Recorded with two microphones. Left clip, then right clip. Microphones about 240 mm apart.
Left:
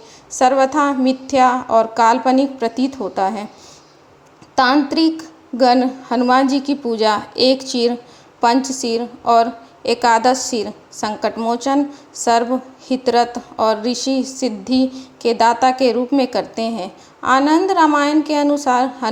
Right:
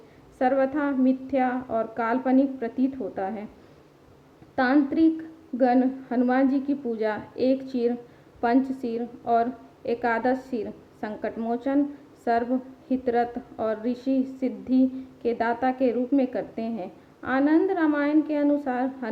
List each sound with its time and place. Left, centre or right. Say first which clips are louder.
0.3 s a woman's voice: left 10 dB; centre
4.5 s a woman's voice: left 8 dB; centre